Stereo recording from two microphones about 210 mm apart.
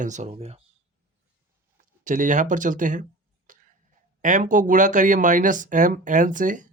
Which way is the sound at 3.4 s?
40° right (ahead or behind).